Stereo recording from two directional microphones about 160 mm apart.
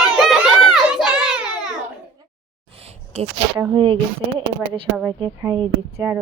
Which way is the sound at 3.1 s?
40° right (ahead or behind).